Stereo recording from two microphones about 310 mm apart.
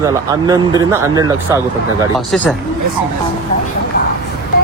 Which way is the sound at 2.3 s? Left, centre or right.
Centre.